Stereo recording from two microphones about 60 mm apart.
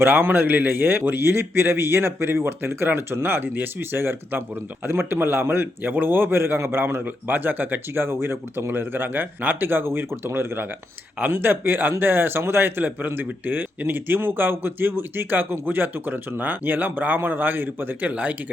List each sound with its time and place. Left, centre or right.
0.0 s a man's voice: right
18.1 s speech: right